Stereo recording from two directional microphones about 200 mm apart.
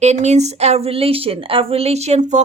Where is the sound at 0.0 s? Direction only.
35° right (ahead or behind).